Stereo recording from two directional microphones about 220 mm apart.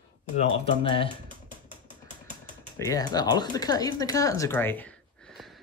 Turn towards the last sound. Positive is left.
turn(degrees=0)  # may be behind; listen again after turning